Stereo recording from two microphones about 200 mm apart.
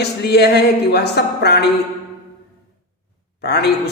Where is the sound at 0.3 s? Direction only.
55° left (ahead or behind).